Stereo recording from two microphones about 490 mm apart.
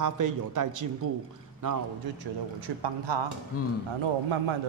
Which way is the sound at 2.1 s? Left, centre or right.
Right.